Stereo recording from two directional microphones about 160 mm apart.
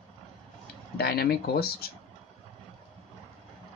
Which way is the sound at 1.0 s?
80° left.